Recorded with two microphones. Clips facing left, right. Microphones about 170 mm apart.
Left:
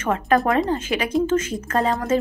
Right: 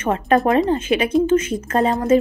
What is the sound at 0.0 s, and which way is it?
Speech, 25° right (ahead or behind).